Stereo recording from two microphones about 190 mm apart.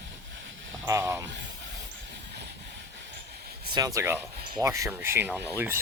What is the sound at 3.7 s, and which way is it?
Speech, 20° right (ahead or behind).